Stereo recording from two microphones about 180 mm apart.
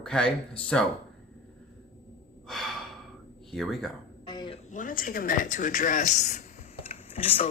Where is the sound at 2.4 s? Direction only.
Centre (ahead or behind).